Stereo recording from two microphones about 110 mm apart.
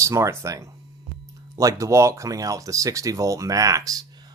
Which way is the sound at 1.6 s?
30° right (ahead or behind).